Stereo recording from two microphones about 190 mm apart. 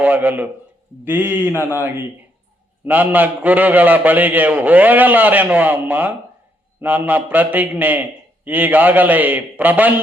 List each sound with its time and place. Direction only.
0.0 s a man's voice: 10° right (ahead or behind)